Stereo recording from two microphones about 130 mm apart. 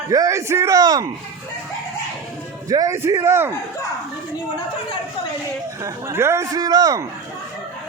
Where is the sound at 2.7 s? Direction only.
25° right (ahead or behind).